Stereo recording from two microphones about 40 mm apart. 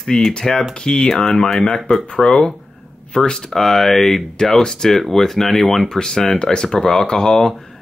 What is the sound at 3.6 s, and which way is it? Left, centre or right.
Speech, centre.